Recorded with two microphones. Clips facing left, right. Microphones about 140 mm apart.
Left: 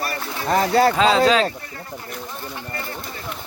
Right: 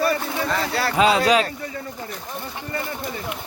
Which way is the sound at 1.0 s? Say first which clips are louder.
Left 1 dB; 10° right (ahead or behind).